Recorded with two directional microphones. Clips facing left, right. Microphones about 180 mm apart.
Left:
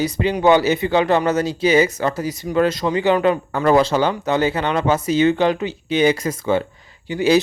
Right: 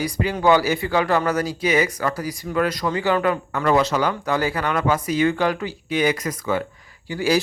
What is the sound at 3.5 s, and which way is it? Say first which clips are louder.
Speech: left 3 dB; 30° left (ahead or behind).